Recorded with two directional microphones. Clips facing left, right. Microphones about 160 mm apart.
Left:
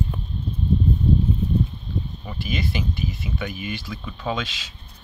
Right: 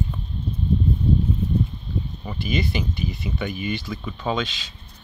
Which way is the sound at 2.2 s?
Centre (ahead or behind).